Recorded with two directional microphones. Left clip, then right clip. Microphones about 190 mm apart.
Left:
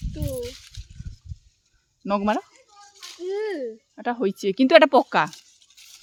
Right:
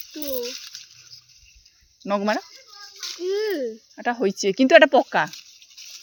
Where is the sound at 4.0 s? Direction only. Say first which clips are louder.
Right 2 dB; 10° left (ahead or behind).